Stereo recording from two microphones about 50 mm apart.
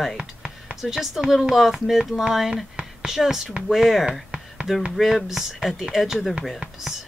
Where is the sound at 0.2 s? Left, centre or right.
Right.